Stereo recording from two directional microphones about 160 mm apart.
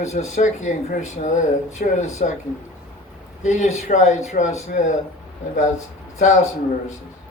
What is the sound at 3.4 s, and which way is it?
Speech, 50° left (ahead or behind).